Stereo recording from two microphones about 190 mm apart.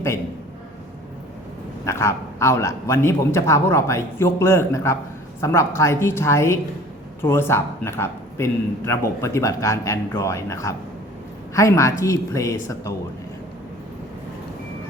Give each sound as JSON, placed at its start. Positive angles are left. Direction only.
{"t": 1.8, "sound": "a man's voice", "side_deg": 15}